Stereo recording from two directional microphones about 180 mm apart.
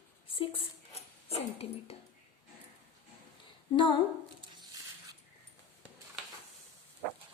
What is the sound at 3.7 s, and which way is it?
Speech, 25° left (ahead or behind).